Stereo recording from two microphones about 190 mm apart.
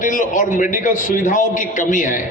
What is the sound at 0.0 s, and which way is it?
A man's voice, 40° left (ahead or behind).